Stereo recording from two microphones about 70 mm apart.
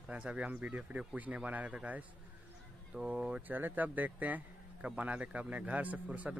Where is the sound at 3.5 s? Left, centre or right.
Right.